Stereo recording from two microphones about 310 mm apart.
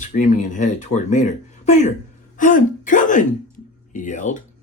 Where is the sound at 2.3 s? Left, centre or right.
Left.